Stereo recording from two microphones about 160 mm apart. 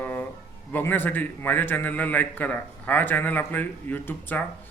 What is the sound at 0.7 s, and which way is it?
A man's voice, 10° left (ahead or behind).